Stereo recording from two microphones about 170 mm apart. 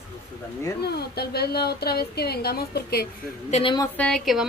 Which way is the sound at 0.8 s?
70° left (ahead or behind).